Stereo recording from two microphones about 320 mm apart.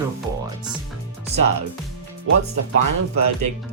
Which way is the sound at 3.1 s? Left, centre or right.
Right.